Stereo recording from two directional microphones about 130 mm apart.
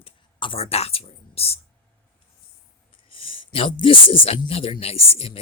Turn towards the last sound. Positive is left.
turn(degrees=50)  # may be behind; listen again after turning